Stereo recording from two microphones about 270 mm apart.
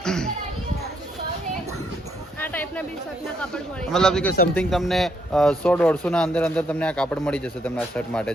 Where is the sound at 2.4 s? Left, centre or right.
Centre.